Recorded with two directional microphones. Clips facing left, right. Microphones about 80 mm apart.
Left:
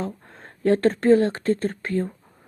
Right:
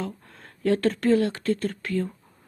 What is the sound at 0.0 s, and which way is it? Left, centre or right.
Speech, left.